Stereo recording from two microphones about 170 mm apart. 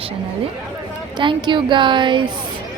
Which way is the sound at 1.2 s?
25° right (ahead or behind).